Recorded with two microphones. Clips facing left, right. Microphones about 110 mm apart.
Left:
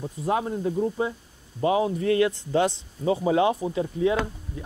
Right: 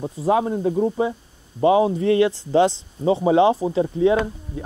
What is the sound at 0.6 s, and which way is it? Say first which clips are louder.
Speech: right 5 dB; 45° right (ahead or behind).